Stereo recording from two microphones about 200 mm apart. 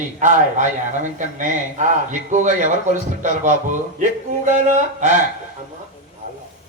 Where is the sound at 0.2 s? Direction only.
40° right (ahead or behind).